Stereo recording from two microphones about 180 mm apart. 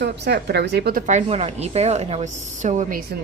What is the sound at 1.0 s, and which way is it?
A woman's voice, 40° right (ahead or behind).